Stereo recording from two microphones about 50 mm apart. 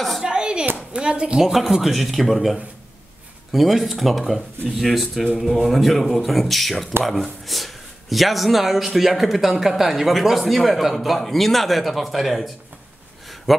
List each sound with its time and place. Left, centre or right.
0.2 s a sound: centre
0.9 s speech: right
1.4 s a man's voice: centre